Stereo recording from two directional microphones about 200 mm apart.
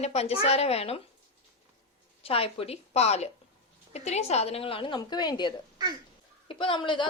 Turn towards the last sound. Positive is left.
turn(degrees=25)  # may be behind; listen again after turning